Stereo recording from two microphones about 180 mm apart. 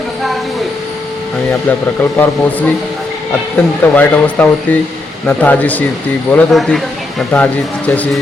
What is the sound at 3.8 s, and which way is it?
Speech, 10° left (ahead or behind).